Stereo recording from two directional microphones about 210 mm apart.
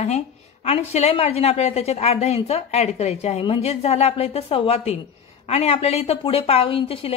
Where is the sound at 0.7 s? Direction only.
30° left (ahead or behind).